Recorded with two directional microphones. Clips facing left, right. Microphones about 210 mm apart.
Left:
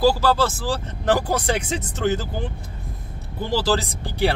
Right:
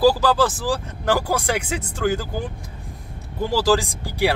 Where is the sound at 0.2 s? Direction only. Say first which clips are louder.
Right 1 dB; 15° right (ahead or behind).